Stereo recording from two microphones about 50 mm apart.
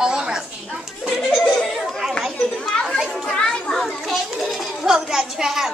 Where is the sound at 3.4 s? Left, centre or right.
Centre.